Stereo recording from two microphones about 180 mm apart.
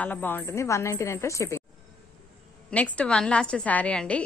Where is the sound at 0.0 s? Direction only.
10° left (ahead or behind).